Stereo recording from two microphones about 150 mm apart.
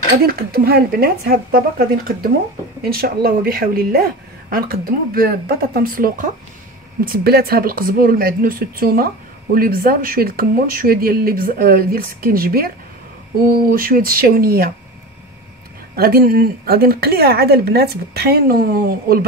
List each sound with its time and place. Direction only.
0.3 s a woman's voice: 90° right
2.8 s a woman's voice: 90° right; by 6.3 s 65° right (ahead or behind)
7.1 s a woman's voice: 90° right
13.5 s a woman's voice: 75° right (ahead or behind); by 14.7 s 90° right
16.0 s a woman's voice: 90° right